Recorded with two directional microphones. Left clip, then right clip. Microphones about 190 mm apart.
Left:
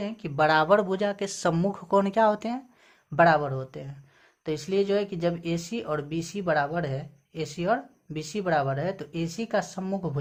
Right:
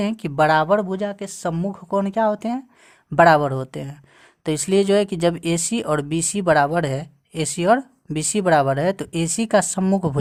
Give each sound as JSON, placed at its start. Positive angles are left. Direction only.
{"t": 0.0, "sound": "speech", "side_deg": -50}
{"t": 3.2, "sound": "speech", "side_deg": -50}